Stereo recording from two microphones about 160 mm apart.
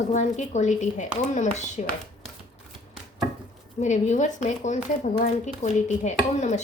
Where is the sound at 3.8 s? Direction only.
50° left (ahead or behind).